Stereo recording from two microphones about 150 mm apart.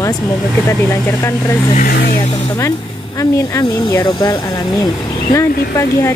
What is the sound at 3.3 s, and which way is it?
Speech, 20° left (ahead or behind).